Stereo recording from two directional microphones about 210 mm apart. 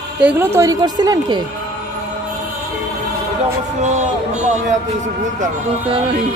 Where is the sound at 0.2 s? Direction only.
10° right (ahead or behind).